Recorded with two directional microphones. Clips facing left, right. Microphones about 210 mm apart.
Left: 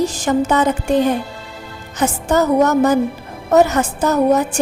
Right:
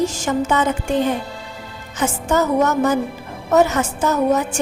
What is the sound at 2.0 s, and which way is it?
A woman's voice, 35° left (ahead or behind).